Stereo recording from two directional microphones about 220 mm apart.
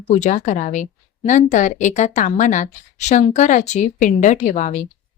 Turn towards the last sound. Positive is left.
turn(degrees=35)  # may be behind; listen again after turning